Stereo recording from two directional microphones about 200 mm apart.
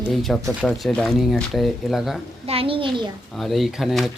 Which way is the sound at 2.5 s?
30° right (ahead or behind).